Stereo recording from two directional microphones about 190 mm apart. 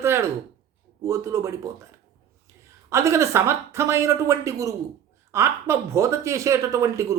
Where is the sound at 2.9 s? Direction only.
15° right (ahead or behind).